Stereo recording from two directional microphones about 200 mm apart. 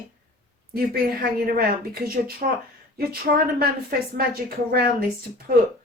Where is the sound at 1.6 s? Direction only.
50° right (ahead or behind).